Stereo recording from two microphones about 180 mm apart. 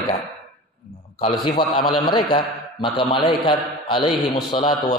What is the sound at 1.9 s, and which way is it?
A man's voice, 25° left (ahead or behind).